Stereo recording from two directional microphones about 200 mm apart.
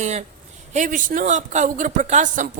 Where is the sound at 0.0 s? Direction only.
35° right (ahead or behind).